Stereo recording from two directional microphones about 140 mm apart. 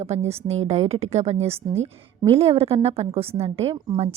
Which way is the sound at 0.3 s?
50° right (ahead or behind).